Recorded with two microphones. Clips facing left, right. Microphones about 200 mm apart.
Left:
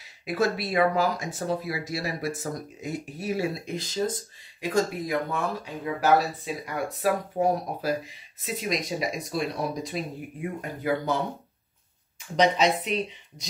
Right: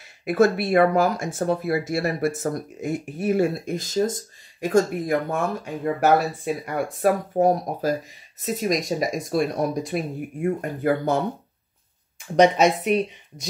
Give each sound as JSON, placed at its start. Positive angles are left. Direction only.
{"t": 0.0, "sound": "speech", "side_deg": -55}
{"t": 12.4, "sound": "speech", "side_deg": -50}